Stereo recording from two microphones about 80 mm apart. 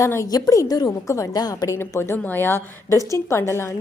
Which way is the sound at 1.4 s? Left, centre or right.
Left.